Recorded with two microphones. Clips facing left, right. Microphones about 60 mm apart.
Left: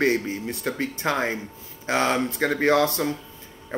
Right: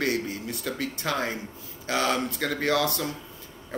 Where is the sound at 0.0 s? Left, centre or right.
Left.